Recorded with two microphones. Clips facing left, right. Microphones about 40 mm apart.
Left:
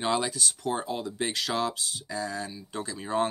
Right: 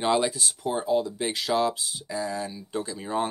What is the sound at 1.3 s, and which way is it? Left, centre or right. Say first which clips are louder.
Speech: right 6 dB; centre.